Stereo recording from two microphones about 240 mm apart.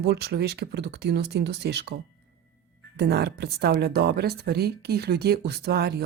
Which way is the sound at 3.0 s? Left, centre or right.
Right.